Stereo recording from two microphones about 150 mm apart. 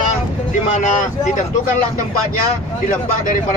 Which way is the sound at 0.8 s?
55° left (ahead or behind).